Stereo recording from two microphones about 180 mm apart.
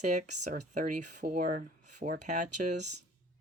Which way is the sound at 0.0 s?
40° right (ahead or behind).